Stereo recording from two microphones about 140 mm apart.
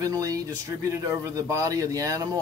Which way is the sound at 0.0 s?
25° right (ahead or behind).